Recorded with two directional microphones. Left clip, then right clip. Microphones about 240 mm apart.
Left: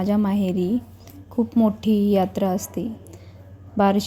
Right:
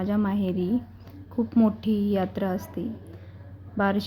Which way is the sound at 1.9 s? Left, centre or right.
Centre.